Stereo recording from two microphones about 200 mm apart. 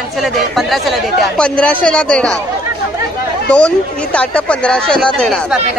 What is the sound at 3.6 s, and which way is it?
Speech, 5° left (ahead or behind).